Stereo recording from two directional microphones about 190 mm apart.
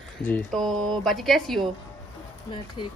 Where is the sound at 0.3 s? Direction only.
Centre (ahead or behind).